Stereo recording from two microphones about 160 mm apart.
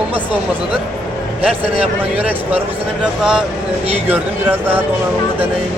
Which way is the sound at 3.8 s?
40° right (ahead or behind).